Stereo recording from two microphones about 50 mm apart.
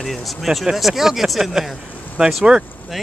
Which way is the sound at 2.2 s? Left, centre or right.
Centre.